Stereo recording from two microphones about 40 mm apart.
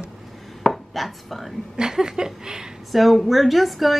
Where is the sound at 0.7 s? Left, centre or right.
Centre.